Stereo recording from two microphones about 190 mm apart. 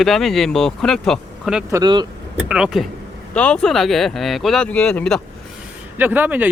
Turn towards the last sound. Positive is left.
turn(degrees=-10)  # may be behind; listen again after turning